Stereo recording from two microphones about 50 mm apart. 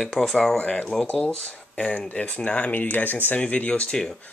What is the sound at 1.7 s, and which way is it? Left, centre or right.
Speech, left.